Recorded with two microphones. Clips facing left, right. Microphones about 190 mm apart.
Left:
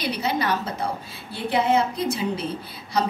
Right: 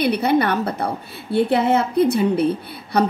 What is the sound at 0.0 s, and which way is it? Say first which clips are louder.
A woman's voice: right 8 dB; 60° right (ahead or behind).